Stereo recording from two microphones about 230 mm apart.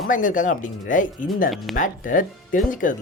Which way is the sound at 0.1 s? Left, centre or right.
Left.